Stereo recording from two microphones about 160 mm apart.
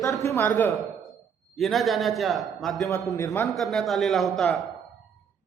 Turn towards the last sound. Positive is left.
turn(degrees=0)  # may be behind; listen again after turning